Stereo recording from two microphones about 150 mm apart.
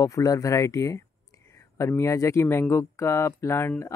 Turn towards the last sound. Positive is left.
turn(degrees=15)  # may be behind; listen again after turning